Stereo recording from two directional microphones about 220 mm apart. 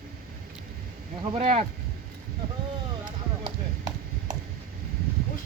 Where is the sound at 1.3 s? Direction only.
25° right (ahead or behind).